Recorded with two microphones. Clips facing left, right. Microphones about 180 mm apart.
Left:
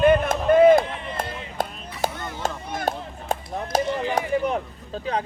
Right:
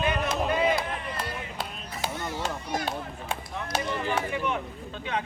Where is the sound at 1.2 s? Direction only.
50° left (ahead or behind).